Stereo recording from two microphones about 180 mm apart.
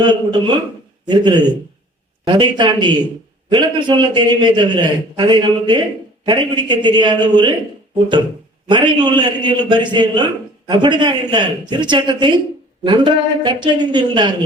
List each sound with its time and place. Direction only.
0.0 s a man's voice: 25° right (ahead or behind)
8.6 s a man's voice: 25° right (ahead or behind)